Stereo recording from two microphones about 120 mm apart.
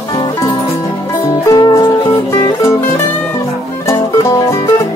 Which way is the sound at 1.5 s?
35° left (ahead or behind).